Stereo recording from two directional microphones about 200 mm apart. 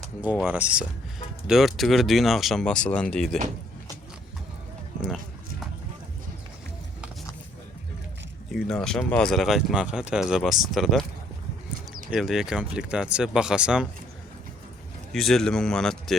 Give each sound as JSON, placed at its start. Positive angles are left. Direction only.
{"t": 0.0, "sound": "speech", "side_deg": -5}
{"t": 8.5, "sound": "speech", "side_deg": 0}
{"t": 12.1, "sound": "speech", "side_deg": 0}
{"t": 15.1, "sound": "speech", "side_deg": 0}